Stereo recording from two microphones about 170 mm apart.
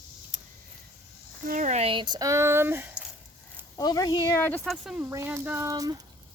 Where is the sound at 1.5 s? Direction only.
45° right (ahead or behind); by 3.1 s 10° right (ahead or behind).